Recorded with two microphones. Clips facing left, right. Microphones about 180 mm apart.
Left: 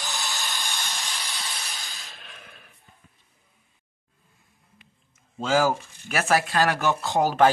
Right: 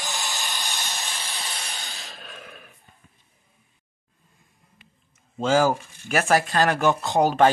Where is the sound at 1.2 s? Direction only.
30° right (ahead or behind).